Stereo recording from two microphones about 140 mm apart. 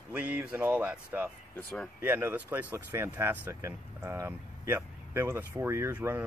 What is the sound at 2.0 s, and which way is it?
Speech, 10° right (ahead or behind).